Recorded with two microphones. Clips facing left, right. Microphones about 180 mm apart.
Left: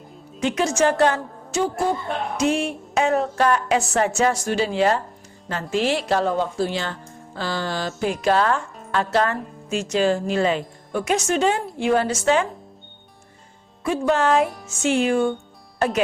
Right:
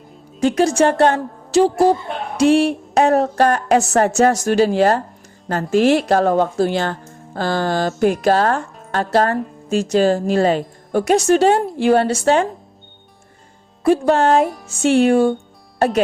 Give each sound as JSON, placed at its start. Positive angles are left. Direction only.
{"t": 0.3, "sound": "speech", "side_deg": -35}
{"t": 2.4, "sound": "a sound", "side_deg": -70}
{"t": 2.9, "sound": "a woman's voice", "side_deg": -40}
{"t": 13.8, "sound": "speech", "side_deg": -35}